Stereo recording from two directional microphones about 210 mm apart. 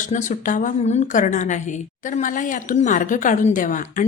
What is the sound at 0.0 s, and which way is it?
A woman's voice, 35° left (ahead or behind).